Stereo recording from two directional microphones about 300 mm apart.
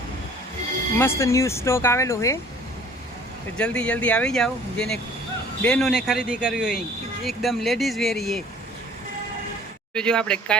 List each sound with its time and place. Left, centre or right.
0.9 s speech: centre
3.6 s speech: centre
9.9 s speech: centre